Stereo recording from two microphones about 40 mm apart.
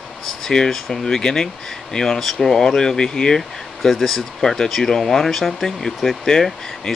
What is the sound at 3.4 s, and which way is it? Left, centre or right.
Speech, centre.